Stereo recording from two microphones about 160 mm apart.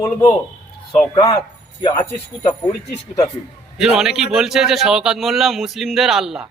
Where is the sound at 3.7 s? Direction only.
5° right (ahead or behind).